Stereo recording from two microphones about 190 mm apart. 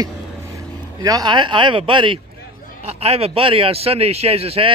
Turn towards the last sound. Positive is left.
turn(degrees=-30)  # may be behind; listen again after turning